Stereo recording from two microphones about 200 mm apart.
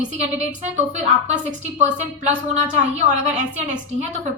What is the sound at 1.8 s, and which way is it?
Speech, 35° right (ahead or behind).